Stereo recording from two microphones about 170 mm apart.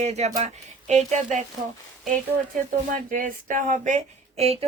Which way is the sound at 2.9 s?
50° right (ahead or behind).